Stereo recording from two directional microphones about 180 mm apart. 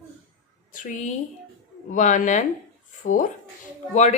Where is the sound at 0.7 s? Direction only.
45° left (ahead or behind).